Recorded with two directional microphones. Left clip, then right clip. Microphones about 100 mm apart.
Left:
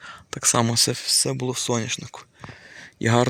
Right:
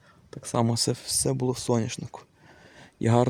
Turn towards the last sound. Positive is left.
turn(degrees=-25)  # may be behind; listen again after turning